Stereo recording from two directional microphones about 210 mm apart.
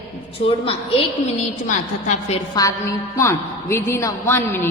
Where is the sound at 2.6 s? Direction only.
20° left (ahead or behind).